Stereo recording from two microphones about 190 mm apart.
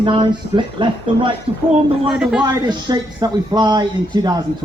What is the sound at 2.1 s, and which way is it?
Speech, centre (ahead or behind).